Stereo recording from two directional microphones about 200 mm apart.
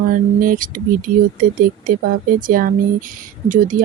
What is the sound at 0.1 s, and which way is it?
Speech, 45° right (ahead or behind).